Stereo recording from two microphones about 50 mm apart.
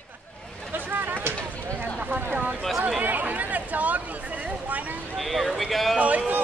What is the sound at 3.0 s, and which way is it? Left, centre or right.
Chatter, right.